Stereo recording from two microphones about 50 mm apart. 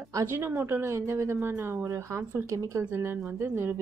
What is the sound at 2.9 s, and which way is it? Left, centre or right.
Speech, right.